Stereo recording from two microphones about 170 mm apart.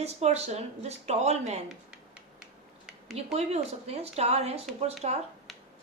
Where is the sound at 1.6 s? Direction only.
5° right (ahead or behind).